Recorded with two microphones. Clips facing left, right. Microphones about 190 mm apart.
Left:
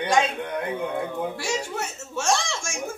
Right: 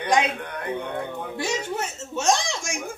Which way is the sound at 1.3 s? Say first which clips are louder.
Right 1 dB; 20° right (ahead or behind).